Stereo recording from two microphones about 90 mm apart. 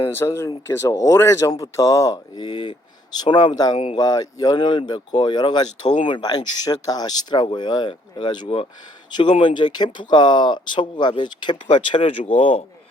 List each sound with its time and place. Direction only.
0.1 s speech: 30° left (ahead or behind); by 12.1 s 75° left (ahead or behind)